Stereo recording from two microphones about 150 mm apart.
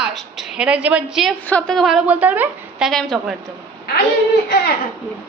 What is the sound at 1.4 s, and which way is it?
A woman's voice, 5° left (ahead or behind).